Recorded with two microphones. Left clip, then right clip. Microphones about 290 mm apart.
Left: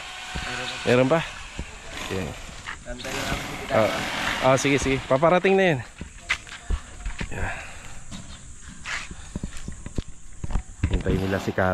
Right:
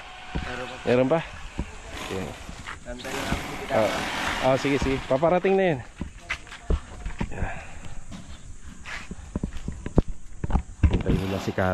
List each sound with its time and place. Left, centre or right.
0.0 s a sound: centre
9.3 s clip-clop: centre
10.8 s mechanisms: centre